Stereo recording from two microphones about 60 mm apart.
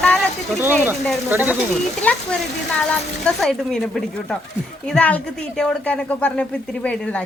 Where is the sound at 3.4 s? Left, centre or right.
Centre.